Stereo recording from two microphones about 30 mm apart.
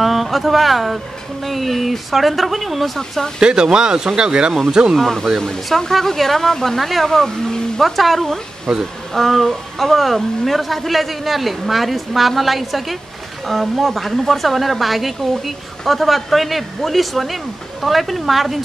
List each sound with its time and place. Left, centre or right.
0.0 s a woman's voice: centre
3.3 s speech: right
5.7 s a woman's voice: centre
7.1 s speech: centre
7.8 s a woman's voice: centre
9.1 s a woman's voice: centre